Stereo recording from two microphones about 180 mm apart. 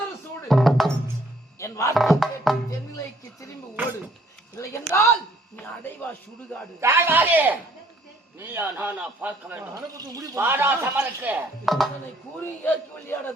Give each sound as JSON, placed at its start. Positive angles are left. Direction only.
{"t": 0.4, "sound": "music", "side_deg": 0}
{"t": 1.5, "sound": "music", "side_deg": 15}
{"t": 2.0, "sound": "music", "side_deg": 0}
{"t": 4.5, "sound": "a sound", "side_deg": 15}
{"t": 6.7, "sound": "speech", "side_deg": -15}
{"t": 12.4, "sound": "a man's voice", "side_deg": 10}